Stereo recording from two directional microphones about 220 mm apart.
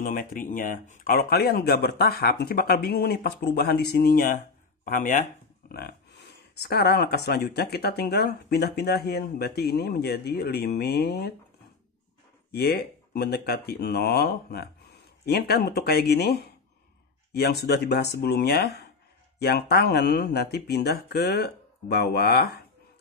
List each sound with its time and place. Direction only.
0.0 s speech: 40° left (ahead or behind)
12.4 s speech: 45° left (ahead or behind)